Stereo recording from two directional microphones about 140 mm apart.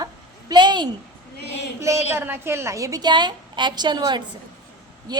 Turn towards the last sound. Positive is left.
turn(degrees=-30)  # may be behind; listen again after turning